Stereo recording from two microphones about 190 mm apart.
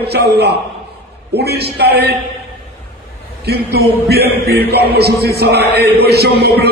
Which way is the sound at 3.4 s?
55° right (ahead or behind).